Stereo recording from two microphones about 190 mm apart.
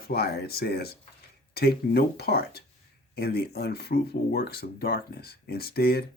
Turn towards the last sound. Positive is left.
turn(degrees=55)  # may be behind; listen again after turning